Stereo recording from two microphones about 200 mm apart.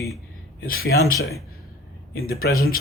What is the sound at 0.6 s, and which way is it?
Speech, 50° left (ahead or behind).